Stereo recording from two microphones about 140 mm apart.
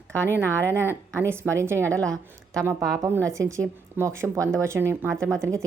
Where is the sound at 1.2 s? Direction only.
20° right (ahead or behind).